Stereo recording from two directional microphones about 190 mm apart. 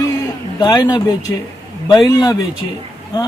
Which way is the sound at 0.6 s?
20° left (ahead or behind).